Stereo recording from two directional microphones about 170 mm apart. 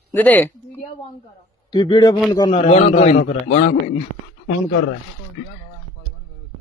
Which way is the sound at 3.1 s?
70° left (ahead or behind).